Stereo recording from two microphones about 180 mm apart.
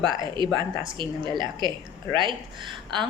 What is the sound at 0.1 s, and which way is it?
A woman's voice, 25° right (ahead or behind).